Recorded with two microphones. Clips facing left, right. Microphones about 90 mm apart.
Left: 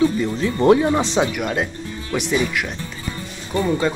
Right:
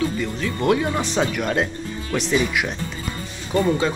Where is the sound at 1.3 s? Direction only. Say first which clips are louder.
Right 1 dB; 5° left (ahead or behind).